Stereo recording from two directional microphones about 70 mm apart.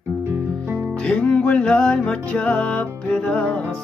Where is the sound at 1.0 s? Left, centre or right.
Centre.